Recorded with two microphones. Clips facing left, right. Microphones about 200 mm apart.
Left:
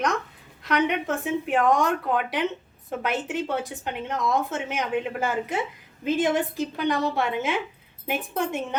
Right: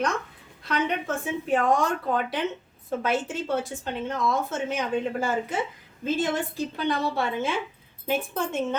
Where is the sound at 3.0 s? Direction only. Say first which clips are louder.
Even; 15° left (ahead or behind).